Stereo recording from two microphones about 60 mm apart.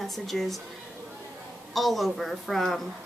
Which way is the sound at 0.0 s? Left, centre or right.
Centre.